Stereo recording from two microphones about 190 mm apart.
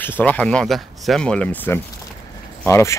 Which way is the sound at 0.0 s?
10° left (ahead or behind).